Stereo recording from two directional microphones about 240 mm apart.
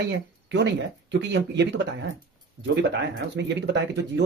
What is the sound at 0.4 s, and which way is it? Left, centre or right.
A man's voice, right.